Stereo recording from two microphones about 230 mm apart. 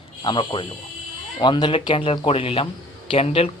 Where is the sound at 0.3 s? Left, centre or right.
Left.